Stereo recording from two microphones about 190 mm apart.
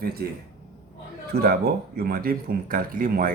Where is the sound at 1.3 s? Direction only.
55° right (ahead or behind).